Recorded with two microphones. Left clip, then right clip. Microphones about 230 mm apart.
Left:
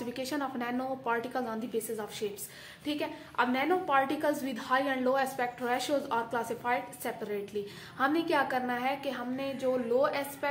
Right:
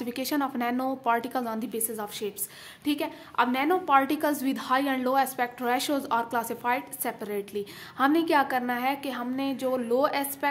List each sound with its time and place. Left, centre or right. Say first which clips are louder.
0.0 s a woman's voice: right 5 dB; right